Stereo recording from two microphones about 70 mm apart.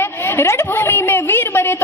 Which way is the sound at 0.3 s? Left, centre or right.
Left.